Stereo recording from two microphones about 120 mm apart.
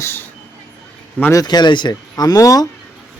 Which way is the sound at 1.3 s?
35° left (ahead or behind).